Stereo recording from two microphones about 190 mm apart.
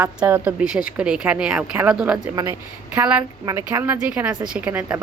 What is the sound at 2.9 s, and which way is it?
A woman's voice, 5° right (ahead or behind).